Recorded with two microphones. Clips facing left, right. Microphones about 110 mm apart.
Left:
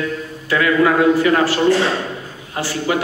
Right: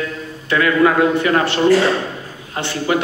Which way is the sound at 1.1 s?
25° right (ahead or behind).